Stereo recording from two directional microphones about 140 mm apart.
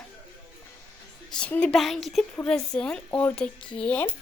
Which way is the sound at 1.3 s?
10° left (ahead or behind).